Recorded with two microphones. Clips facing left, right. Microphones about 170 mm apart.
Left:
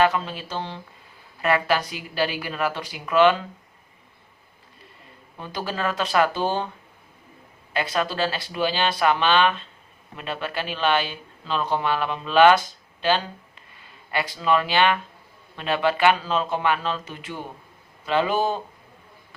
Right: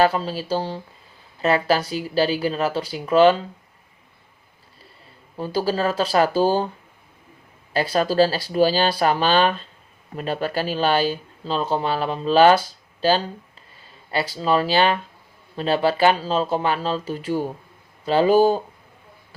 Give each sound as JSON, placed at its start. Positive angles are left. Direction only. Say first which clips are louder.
{"t": 0.0, "sound": "speech", "louder": "right 2 dB", "side_deg": -35}
{"t": 5.4, "sound": "speech", "louder": "right 7 dB", "side_deg": -35}
{"t": 7.7, "sound": "speech", "louder": "right 4 dB", "side_deg": -35}